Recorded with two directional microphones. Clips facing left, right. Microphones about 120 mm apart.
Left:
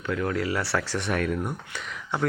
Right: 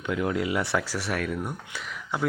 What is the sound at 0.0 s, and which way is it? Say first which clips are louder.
Speech: even; 15° right (ahead or behind).